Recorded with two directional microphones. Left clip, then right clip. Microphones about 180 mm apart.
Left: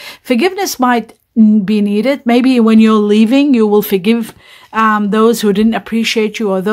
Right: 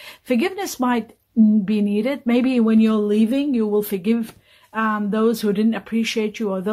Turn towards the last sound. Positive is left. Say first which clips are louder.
# left 9 dB
turn(degrees=30)  # may be behind; listen again after turning